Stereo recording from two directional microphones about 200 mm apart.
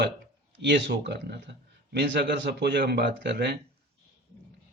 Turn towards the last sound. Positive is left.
turn(degrees=-60)  # may be behind; listen again after turning